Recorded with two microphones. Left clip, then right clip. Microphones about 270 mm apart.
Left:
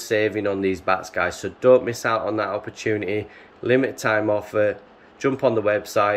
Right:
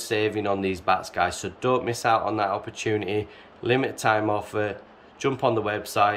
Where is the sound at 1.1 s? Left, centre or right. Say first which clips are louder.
Left 1 dB; centre.